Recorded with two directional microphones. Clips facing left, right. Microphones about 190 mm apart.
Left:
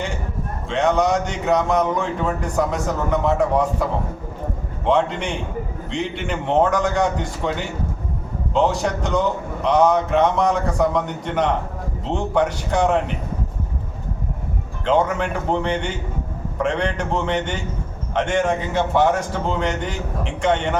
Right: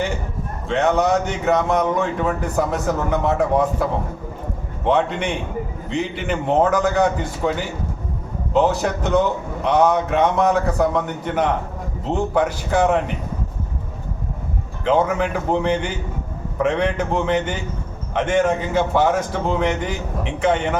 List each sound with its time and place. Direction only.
0.7 s speech: 5° right (ahead or behind)
4.9 s speech: 5° right (ahead or behind)
8.5 s speech: 5° right (ahead or behind)
14.8 s speech: 5° right (ahead or behind)